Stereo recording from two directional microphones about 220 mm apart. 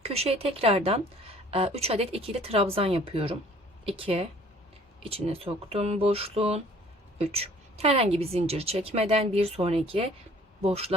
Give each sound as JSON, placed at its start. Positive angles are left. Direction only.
{"t": 0.0, "sound": "a woman's voice", "side_deg": -25}